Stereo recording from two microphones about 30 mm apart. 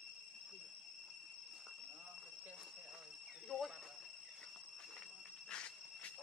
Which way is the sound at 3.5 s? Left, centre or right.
Centre.